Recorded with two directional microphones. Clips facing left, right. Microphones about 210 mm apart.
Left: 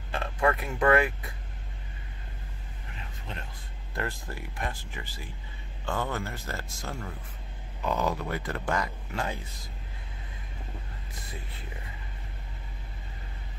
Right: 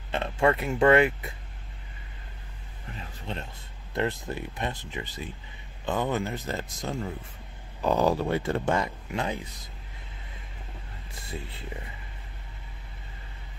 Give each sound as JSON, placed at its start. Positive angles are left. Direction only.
{"t": 0.1, "sound": "speech", "side_deg": -25}
{"t": 3.9, "sound": "speech", "side_deg": -20}
{"t": 7.8, "sound": "speech", "side_deg": -35}